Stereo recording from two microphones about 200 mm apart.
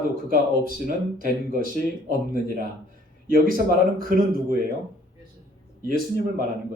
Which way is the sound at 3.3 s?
45° right (ahead or behind).